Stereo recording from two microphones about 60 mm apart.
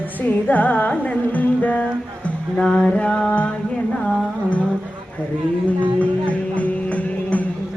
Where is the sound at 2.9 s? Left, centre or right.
Centre.